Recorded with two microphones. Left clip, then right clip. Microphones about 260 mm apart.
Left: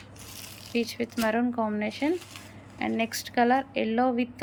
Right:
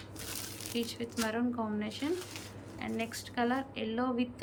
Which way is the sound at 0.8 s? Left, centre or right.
Centre.